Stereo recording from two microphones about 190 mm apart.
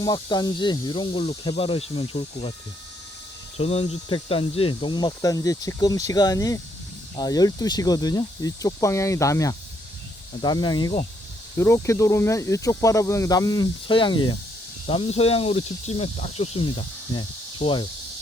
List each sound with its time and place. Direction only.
0.0 s speech: 20° left (ahead or behind)
3.6 s speech: 30° left (ahead or behind)